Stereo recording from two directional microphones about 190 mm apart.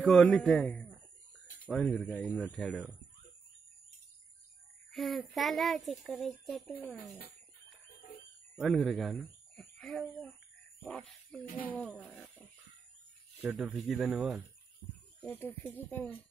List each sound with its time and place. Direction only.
0.0 s a man's voice: centre (ahead or behind)
4.9 s a child's voice: centre (ahead or behind)
8.5 s speech: centre (ahead or behind)
13.4 s a child's voice: 5° right (ahead or behind)
15.2 s speech: 10° left (ahead or behind)